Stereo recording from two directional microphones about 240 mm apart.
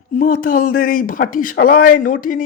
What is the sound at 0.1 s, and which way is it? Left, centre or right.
Speech, left.